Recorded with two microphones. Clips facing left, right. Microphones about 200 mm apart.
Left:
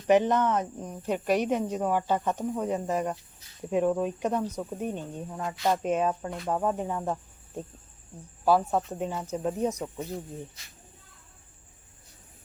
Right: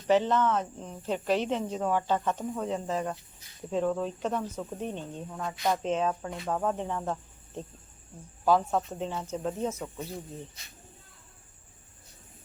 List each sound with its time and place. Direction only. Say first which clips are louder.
0.1 s speech: left 2 dB; 15° left (ahead or behind)
6.5 s cricket: left 2 dB; 10° left (ahead or behind)
8.4 s speech: left 1 dB; 10° left (ahead or behind)